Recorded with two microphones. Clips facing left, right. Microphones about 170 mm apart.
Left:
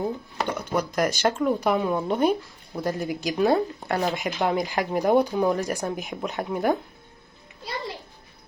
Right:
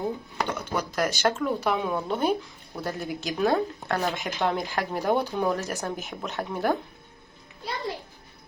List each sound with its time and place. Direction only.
0.3 s a sound: 10° left (ahead or behind)
0.9 s speech: 10° left (ahead or behind)
3.8 s speech: 15° left (ahead or behind)
4.1 s speech: 5° left (ahead or behind)